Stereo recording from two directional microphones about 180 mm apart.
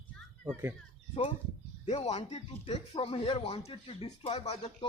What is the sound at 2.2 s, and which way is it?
Speech, 35° left (ahead or behind).